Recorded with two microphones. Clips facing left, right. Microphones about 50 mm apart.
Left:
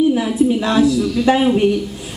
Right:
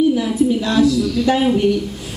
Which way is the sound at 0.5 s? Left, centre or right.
Left.